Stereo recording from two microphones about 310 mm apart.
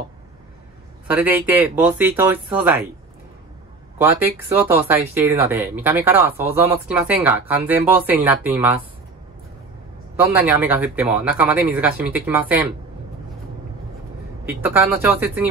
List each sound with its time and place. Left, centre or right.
1.0 s speech: centre
4.0 s speech: centre
10.1 s speech: centre
14.4 s speech: centre